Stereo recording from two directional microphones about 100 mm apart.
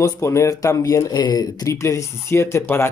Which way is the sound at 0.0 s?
30° left (ahead or behind).